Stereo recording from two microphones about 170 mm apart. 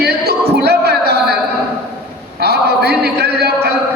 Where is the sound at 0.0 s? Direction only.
75° right (ahead or behind).